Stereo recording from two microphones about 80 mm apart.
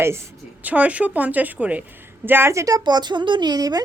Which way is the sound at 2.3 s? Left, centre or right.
Right.